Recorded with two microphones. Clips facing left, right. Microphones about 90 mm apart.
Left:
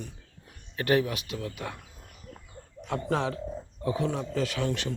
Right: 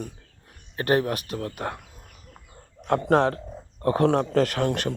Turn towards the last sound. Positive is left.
turn(degrees=-55)  # may be behind; listen again after turning